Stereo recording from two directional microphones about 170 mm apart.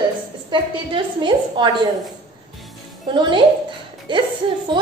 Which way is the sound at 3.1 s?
30° right (ahead or behind).